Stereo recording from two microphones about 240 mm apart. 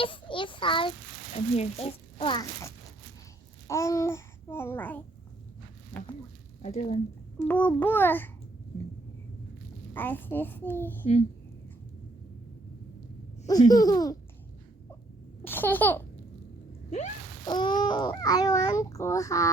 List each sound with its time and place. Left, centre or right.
0.0 s a child's voice: left
6.6 s speech: left
7.4 s a child's voice: centre
9.9 s a child's voice: centre
13.5 s a child's voice: centre
15.4 s a sound: centre
17.4 s a child's voice: centre